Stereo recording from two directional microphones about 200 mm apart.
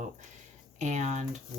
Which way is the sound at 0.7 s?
35° right (ahead or behind).